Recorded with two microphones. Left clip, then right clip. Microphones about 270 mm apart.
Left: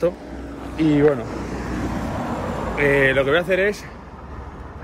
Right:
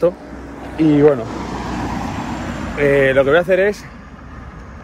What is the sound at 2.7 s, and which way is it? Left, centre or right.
Speech, centre.